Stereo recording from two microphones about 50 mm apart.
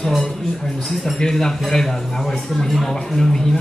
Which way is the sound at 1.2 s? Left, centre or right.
Centre.